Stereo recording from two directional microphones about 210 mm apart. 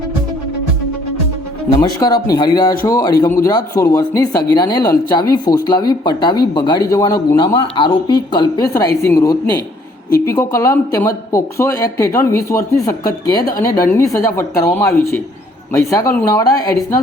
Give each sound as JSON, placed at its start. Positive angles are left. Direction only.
{"t": 1.8, "sound": "speech", "side_deg": 20}